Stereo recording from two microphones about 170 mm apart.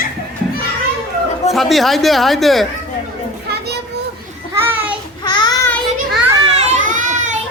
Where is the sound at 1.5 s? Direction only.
Centre (ahead or behind).